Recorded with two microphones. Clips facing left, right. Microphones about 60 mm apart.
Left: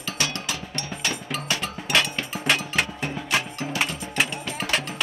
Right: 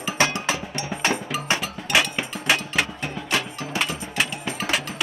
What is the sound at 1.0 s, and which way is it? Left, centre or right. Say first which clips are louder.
Cowbell: right 6 dB; right.